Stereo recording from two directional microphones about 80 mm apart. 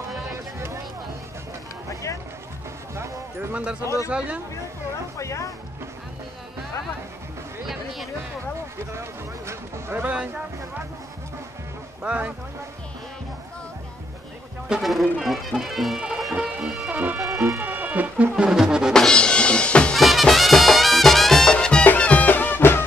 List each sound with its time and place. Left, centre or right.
0.3 s a sound: right
3.8 s speech: left
4.1 s speech: centre
5.1 s speech: left
9.5 s speech: right
10.0 s speech: centre
12.0 s speech: centre
14.7 s music: centre
16.9 s music: right
17.2 s music: centre
17.6 s music: right
18.3 s music: centre
18.9 s music: centre
20.0 s music: centre; by 22.8 s left